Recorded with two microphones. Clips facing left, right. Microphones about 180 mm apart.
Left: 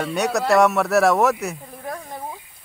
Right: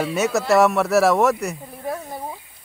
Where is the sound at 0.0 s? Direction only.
Centre (ahead or behind).